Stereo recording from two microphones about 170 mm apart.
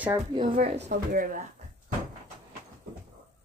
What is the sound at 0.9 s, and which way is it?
Speech, 55° right (ahead or behind).